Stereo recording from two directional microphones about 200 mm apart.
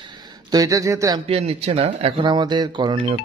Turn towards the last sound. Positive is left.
turn(degrees=-25)  # may be behind; listen again after turning